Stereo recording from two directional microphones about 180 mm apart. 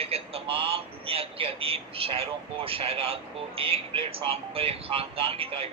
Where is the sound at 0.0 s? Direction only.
30° right (ahead or behind).